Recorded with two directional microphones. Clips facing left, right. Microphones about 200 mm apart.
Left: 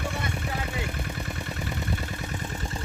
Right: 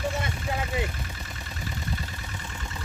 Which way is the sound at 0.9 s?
55° left (ahead or behind).